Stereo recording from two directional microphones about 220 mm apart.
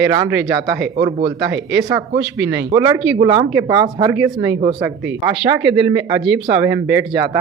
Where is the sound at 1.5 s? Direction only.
55° right (ahead or behind).